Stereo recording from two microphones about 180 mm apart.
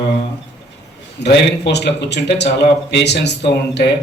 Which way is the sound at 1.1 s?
70° left (ahead or behind).